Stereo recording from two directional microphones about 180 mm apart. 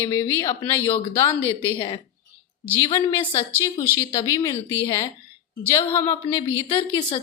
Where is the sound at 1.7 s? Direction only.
25° left (ahead or behind).